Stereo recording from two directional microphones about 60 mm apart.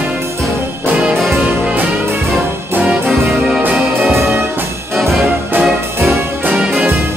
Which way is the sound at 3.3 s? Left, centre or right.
Centre.